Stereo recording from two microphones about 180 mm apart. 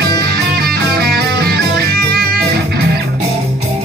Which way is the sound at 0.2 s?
60° right (ahead or behind).